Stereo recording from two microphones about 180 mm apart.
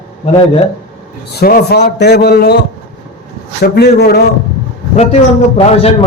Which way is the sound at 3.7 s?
65° left (ahead or behind).